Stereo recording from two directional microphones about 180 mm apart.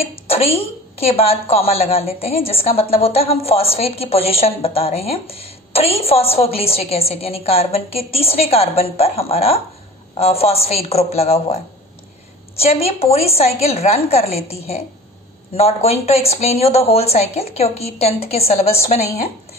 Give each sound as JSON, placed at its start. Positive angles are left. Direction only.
{"t": 0.0, "sound": "a woman's voice", "side_deg": 30}
{"t": 12.5, "sound": "a woman's voice", "side_deg": 35}